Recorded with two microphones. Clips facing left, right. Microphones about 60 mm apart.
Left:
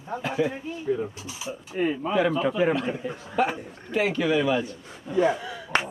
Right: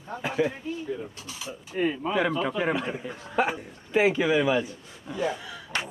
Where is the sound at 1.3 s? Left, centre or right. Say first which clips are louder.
Left 3 dB; centre.